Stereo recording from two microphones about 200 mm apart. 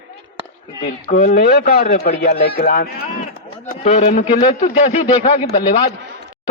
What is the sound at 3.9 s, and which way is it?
Speech, 40° left (ahead or behind).